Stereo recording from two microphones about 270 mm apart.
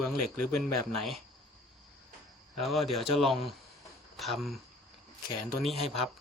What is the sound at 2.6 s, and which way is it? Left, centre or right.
Speech, centre.